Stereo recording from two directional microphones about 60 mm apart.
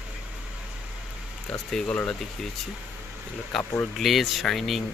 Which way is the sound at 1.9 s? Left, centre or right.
Left.